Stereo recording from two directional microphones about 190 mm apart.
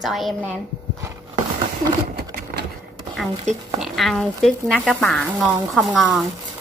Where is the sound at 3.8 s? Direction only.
Centre (ahead or behind).